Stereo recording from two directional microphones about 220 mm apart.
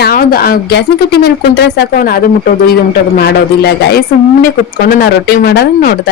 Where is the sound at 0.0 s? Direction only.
40° left (ahead or behind).